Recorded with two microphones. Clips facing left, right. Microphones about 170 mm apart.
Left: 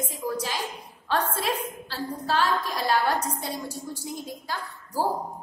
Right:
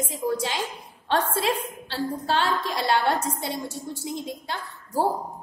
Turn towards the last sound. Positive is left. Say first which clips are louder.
# right 3 dB
turn(degrees=-25)  # may be behind; listen again after turning